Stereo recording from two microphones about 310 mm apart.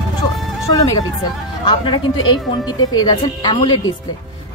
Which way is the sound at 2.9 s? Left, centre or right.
Centre.